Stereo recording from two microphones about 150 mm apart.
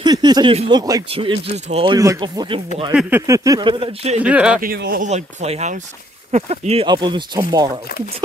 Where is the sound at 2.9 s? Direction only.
5° right (ahead or behind).